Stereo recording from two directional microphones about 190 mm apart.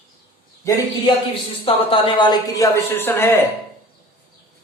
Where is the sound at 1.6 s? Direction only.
30° left (ahead or behind); by 3.4 s 10° left (ahead or behind).